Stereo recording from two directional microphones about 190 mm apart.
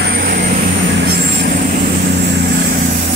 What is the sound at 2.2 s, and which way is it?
Vehicle, 65° right (ahead or behind).